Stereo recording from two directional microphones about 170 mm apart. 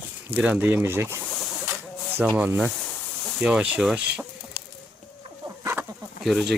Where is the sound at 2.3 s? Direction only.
10° right (ahead or behind).